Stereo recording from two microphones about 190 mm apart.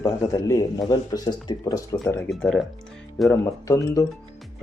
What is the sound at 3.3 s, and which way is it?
Speech, 15° left (ahead or behind).